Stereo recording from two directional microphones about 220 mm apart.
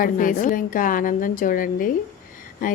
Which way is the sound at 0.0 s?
40° left (ahead or behind).